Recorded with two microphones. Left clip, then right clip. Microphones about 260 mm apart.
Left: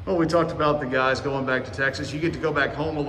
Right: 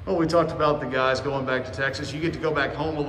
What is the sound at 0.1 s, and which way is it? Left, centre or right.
A man's voice, centre.